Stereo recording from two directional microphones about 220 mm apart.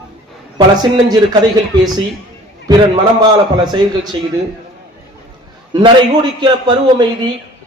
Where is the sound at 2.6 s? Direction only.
20° right (ahead or behind).